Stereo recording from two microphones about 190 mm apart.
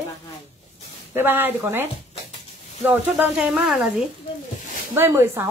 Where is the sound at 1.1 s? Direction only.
10° right (ahead or behind).